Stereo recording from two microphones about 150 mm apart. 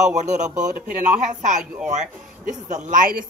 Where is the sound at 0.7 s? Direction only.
70° right (ahead or behind).